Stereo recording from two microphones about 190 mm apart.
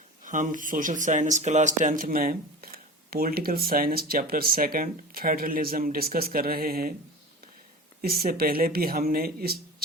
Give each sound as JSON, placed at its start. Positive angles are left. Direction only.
{"t": 0.3, "sound": "speech", "side_deg": -45}
{"t": 8.0, "sound": "speech", "side_deg": -50}